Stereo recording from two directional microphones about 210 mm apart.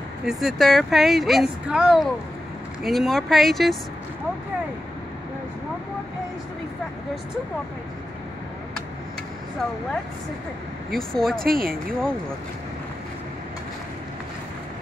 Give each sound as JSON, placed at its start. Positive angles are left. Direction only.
{"t": 0.2, "sound": "speech", "side_deg": 0}
{"t": 10.9, "sound": "speech", "side_deg": 0}
{"t": 11.4, "sound": "speech", "side_deg": -45}